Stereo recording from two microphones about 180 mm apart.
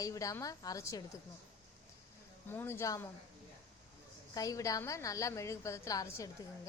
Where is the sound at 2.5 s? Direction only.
15° left (ahead or behind).